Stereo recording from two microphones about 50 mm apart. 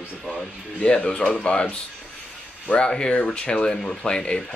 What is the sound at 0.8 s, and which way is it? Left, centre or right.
Speech, left.